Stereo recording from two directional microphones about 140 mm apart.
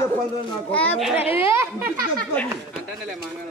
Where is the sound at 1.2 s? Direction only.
40° left (ahead or behind).